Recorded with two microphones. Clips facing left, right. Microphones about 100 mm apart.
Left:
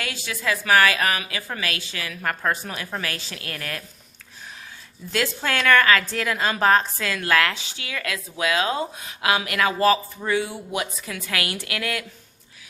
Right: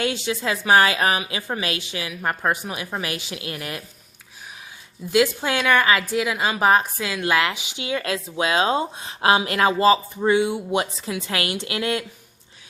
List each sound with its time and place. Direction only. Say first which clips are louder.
0.0 s a woman's voice: right 5 dB; 25° right (ahead or behind)
5.1 s a woman's voice: right 5 dB; 15° right (ahead or behind)